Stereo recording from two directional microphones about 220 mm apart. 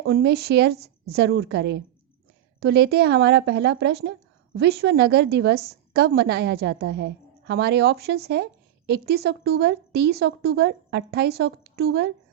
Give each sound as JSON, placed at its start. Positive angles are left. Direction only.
{"t": 0.1, "sound": "a woman's voice", "side_deg": -50}